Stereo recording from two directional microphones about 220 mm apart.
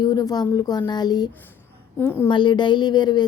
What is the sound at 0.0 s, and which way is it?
A woman's voice, 20° left (ahead or behind).